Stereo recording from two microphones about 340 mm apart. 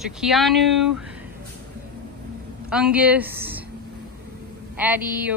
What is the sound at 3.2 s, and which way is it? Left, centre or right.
Speech, right.